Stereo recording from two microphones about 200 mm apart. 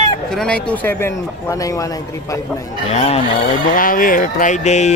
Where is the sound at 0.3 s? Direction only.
5° left (ahead or behind).